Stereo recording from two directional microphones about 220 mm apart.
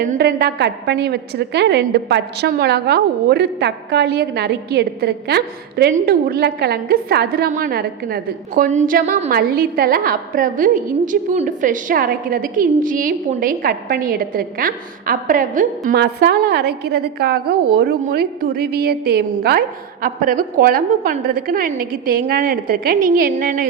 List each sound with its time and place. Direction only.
0.0 s a woman's voice: 40° right (ahead or behind)